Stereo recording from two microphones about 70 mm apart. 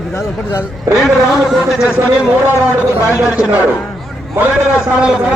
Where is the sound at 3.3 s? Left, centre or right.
Centre.